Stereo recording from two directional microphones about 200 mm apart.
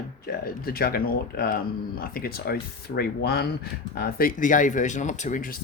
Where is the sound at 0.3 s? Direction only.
50° left (ahead or behind).